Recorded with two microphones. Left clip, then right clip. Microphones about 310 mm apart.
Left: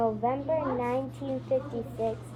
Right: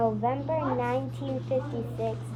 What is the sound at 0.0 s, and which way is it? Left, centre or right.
A woman's voice, right.